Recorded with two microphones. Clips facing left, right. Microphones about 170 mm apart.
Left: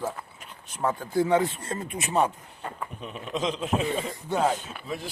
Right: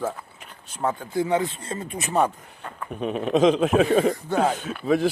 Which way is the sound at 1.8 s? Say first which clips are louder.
Right 3 dB; 40° right (ahead or behind).